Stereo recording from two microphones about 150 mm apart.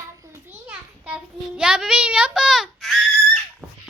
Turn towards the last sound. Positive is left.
turn(degrees=0)  # may be behind; listen again after turning